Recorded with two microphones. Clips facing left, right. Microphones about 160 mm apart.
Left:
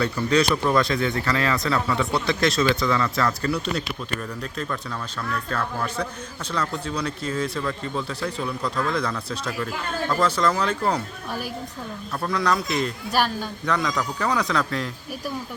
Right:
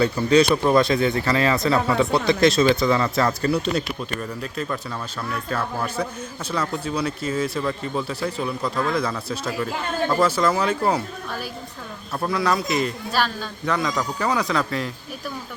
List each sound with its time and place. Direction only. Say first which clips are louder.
0.0 s speech: right 4 dB; 20° right (ahead or behind)
4.2 s a man's voice: right 2 dB; 5° right (ahead or behind)
12.2 s a man's voice: right 1 dB; 5° right (ahead or behind)
13.1 s a man's voice: left 1 dB; 15° left (ahead or behind)
13.7 s a man's voice: right 1 dB; centre (ahead or behind)